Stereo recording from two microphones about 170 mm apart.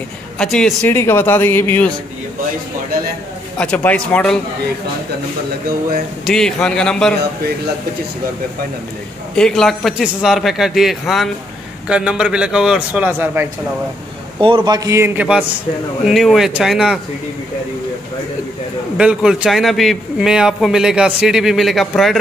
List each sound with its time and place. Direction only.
0.4 s a man's voice: 5° left (ahead or behind)
0.9 s a man's voice: 15° left (ahead or behind)
3.5 s a man's voice: 10° left (ahead or behind)
6.2 s a man's voice: centre (ahead or behind)
9.3 s a man's voice: 5° left (ahead or behind)
14.4 s a man's voice: 30° right (ahead or behind); by 17.0 s 5° right (ahead or behind)
18.9 s a man's voice: 5° right (ahead or behind)